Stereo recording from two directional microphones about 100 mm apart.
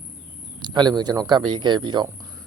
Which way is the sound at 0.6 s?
45° right (ahead or behind).